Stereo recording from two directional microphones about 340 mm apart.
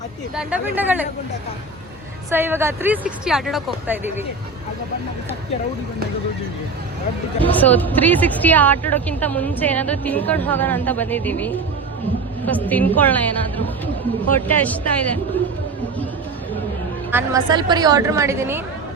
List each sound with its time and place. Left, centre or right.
0.3 s a woman's voice: centre
2.3 s a woman's voice: centre
7.4 s a woman's voice: centre
17.1 s a woman's voice: centre